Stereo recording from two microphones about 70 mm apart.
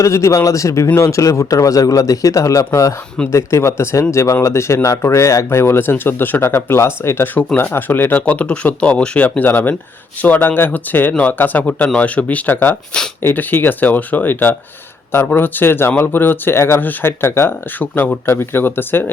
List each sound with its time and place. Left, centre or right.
0.0 s speech: left